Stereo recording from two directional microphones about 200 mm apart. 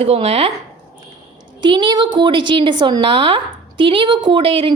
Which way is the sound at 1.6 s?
25° right (ahead or behind).